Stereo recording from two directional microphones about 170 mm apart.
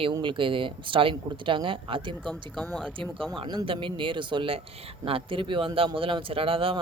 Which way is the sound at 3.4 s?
30° right (ahead or behind).